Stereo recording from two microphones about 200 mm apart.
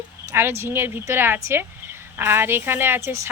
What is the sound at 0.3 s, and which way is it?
Speech, 10° right (ahead or behind).